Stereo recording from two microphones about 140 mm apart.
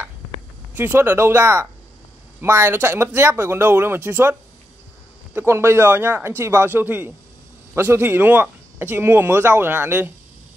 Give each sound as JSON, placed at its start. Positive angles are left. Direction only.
{"t": 0.7, "sound": "speech", "side_deg": -15}